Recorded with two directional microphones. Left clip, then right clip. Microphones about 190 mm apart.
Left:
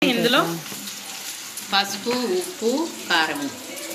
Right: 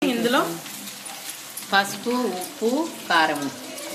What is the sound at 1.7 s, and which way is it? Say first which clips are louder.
Frying: right 1 dB; 45° right (ahead or behind).